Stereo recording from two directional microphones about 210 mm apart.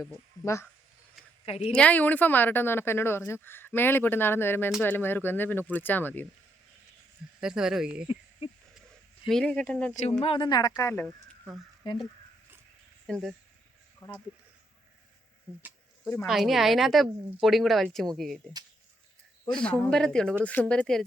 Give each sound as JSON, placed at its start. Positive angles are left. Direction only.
{"t": 0.4, "sound": "a woman's voice", "side_deg": 15}
{"t": 1.5, "sound": "speech", "side_deg": 30}
{"t": 1.7, "sound": "a woman's voice", "side_deg": 5}
{"t": 7.4, "sound": "a woman's voice", "side_deg": -5}
{"t": 9.2, "sound": "a woman's voice", "side_deg": 5}
{"t": 9.9, "sound": "speech", "side_deg": 35}
{"t": 10.2, "sound": "speech", "side_deg": 20}
{"t": 11.9, "sound": "speech", "side_deg": 20}
{"t": 13.1, "sound": "speech", "side_deg": 0}
{"t": 14.0, "sound": "a woman's voice", "side_deg": 20}
{"t": 15.5, "sound": "speech", "side_deg": -15}
{"t": 16.2, "sound": "a woman's voice", "side_deg": 0}